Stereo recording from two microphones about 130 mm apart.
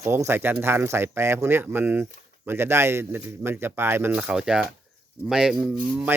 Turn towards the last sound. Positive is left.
turn(degrees=-10)  # may be behind; listen again after turning